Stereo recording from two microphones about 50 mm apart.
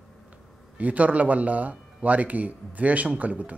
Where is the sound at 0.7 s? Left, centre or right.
Right.